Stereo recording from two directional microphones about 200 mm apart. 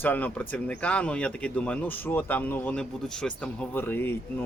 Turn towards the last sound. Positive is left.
turn(degrees=10)  # may be behind; listen again after turning